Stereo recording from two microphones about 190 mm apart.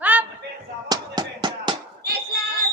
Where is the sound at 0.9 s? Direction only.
20° right (ahead or behind).